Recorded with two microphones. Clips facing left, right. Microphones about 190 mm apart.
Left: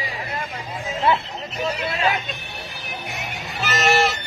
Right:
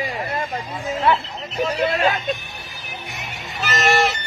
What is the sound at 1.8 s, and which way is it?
Vehicle, 40° right (ahead or behind).